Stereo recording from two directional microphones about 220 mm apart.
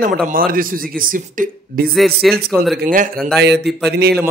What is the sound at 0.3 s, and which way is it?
A man's voice, 40° right (ahead or behind).